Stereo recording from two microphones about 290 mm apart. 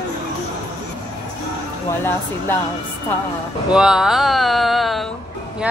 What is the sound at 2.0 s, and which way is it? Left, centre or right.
Speech, centre.